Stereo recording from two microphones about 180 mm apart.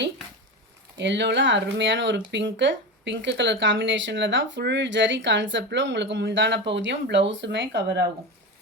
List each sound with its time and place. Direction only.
0.9 s speech: 75° right (ahead or behind)